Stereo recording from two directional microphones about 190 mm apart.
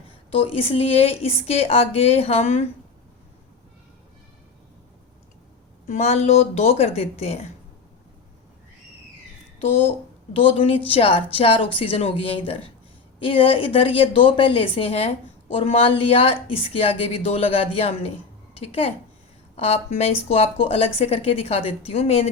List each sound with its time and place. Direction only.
0.3 s a woman's voice: 30° left (ahead or behind)
5.9 s a woman's voice: 35° left (ahead or behind)
10.3 s a woman's voice: 30° left (ahead or behind)